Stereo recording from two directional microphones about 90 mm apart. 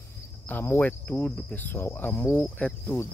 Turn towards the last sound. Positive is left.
turn(degrees=30)  # may be behind; listen again after turning